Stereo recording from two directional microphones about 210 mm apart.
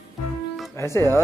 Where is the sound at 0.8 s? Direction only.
15° left (ahead or behind).